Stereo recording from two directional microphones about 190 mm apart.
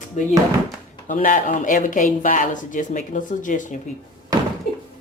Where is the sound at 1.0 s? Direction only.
45° left (ahead or behind).